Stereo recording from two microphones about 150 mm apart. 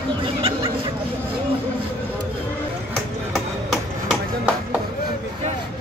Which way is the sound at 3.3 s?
Centre (ahead or behind).